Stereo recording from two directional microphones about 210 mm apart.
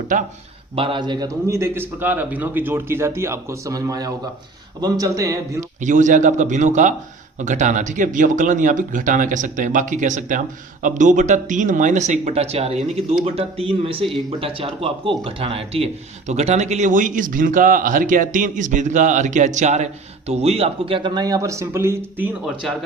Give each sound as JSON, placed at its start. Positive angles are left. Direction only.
{"t": 0.8, "sound": "a man's voice", "side_deg": -25}
{"t": 5.8, "sound": "speech", "side_deg": -35}
{"t": 22.6, "sound": "speech", "side_deg": 0}